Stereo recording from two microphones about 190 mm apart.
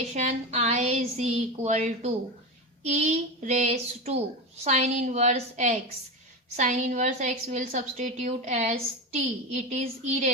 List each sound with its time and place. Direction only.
0.1 s a woman's voice: 35° right (ahead or behind)